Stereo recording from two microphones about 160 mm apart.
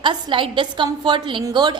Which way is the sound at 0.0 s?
30° right (ahead or behind).